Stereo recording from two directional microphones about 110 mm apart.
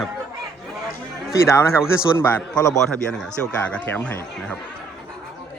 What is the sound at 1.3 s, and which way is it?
A man's voice, 30° left (ahead or behind).